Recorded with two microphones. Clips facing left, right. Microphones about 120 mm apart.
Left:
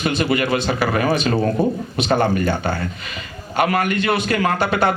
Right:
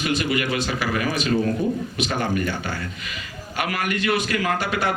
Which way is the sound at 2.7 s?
30° left (ahead or behind).